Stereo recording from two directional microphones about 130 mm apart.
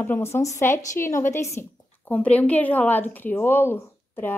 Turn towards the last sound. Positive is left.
turn(degrees=15)  # may be behind; listen again after turning